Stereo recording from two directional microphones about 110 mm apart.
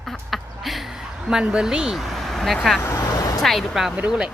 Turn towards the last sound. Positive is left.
turn(degrees=-5)  # may be behind; listen again after turning